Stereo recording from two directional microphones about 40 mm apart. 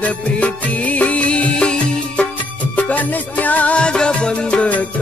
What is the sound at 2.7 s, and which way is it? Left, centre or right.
Music, left.